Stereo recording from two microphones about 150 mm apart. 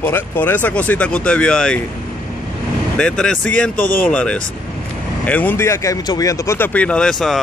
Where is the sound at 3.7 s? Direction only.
65° left (ahead or behind).